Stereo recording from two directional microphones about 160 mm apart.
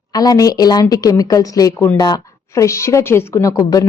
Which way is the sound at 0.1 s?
25° left (ahead or behind).